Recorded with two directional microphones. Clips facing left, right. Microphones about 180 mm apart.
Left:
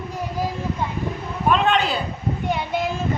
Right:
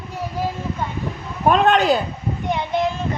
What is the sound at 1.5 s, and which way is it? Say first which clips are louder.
Speech: right 4 dB; 45° right (ahead or behind).